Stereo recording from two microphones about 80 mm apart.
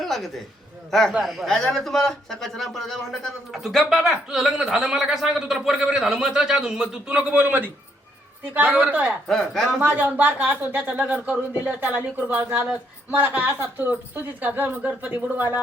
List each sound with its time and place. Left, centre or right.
0.0 s a man's voice: centre
9.2 s a man's voice: centre
9.8 s a woman's voice: right